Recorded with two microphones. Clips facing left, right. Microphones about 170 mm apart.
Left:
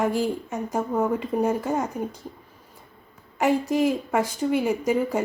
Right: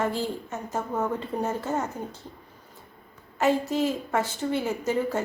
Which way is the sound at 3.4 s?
15° left (ahead or behind).